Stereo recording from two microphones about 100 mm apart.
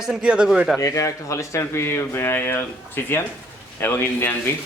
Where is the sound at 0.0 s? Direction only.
10° right (ahead or behind).